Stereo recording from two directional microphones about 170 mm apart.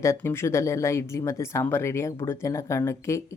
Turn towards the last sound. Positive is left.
turn(degrees=15)  # may be behind; listen again after turning